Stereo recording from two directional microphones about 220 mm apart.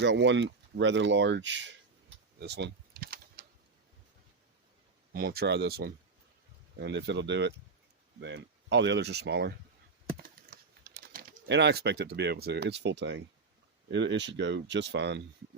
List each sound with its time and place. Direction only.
0.0 s speech: 55° right (ahead or behind)
2.4 s a sound: 50° right (ahead or behind)
5.1 s speech: 45° right (ahead or behind)
10.2 s typing: 40° right (ahead or behind)
13.8 s speech: 55° right (ahead or behind)